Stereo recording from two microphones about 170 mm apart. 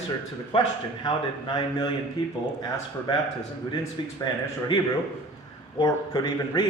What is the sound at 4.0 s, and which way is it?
Speech, 30° left (ahead or behind).